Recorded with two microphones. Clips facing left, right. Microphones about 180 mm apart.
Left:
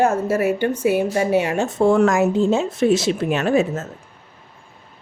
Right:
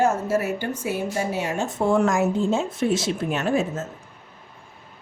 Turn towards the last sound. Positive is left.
turn(degrees=70)  # may be behind; listen again after turning